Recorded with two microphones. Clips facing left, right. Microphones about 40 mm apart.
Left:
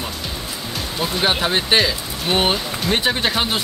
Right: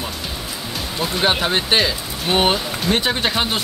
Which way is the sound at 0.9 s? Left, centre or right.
Centre.